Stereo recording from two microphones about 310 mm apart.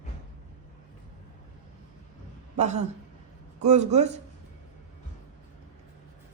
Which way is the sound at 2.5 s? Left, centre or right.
Right.